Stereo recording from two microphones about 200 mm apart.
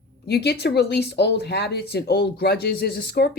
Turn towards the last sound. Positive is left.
turn(degrees=50)  # may be behind; listen again after turning